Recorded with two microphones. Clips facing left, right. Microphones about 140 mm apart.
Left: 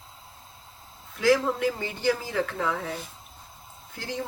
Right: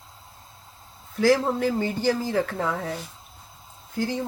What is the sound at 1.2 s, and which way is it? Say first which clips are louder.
Speech: right 2 dB; 35° right (ahead or behind).